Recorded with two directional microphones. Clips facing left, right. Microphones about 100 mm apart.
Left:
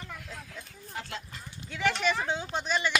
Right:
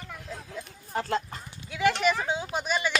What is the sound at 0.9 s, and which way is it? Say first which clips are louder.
Speech: right 11 dB; 40° right (ahead or behind).